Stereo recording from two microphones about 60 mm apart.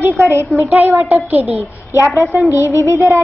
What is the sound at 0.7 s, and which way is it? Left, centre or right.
Speech, right.